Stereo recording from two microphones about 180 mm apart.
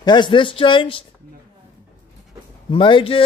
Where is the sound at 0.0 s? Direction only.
25° left (ahead or behind).